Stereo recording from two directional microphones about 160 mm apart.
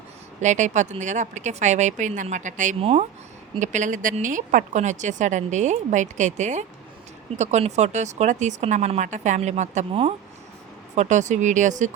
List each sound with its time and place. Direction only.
0.4 s speech: 50° right (ahead or behind)